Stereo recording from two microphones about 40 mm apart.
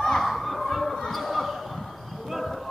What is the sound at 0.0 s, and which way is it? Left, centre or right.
Children playing, centre.